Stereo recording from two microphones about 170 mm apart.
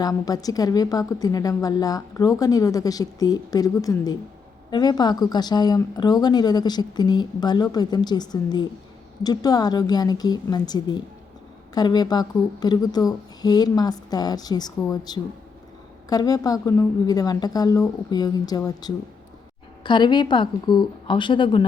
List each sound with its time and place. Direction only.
0.0 s a woman's voice: 20° left (ahead or behind)